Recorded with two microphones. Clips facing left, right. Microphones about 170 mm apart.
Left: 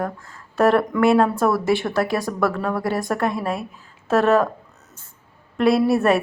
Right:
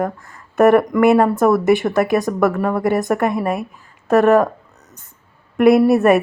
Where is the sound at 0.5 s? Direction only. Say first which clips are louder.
Right 5 dB; 20° right (ahead or behind).